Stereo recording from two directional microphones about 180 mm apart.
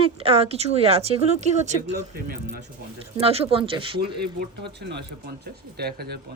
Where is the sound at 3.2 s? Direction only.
35° right (ahead or behind).